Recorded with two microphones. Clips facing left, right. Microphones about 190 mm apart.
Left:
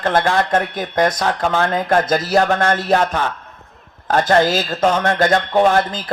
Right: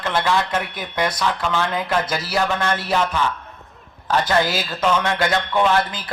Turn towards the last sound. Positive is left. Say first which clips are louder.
# left 4 dB
turn(degrees=45)  # may be behind; listen again after turning